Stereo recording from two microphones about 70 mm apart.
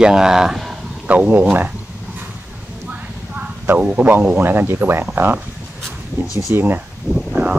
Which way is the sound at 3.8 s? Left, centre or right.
Right.